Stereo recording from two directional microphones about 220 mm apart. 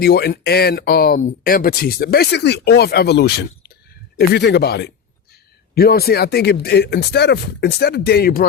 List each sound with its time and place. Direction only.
0.0 s speech: 45° left (ahead or behind)